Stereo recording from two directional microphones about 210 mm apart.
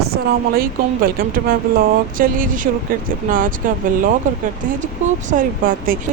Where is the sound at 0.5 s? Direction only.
45° right (ahead or behind).